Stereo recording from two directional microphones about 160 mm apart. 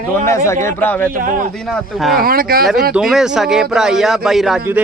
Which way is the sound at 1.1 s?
60° right (ahead or behind).